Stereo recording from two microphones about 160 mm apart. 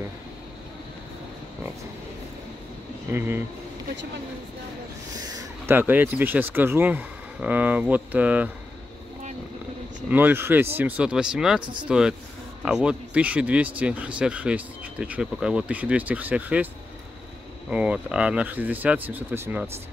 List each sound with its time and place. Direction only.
3.1 s speech: 15° right (ahead or behind)
5.2 s speech: 20° right (ahead or behind)
10.0 s speech: 10° right (ahead or behind)
11.6 s speech: 30° right (ahead or behind)
11.9 s speech: 5° right (ahead or behind)
17.6 s speech: 5° right (ahead or behind)